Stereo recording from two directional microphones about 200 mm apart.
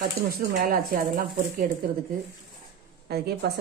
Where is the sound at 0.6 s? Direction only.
45° right (ahead or behind).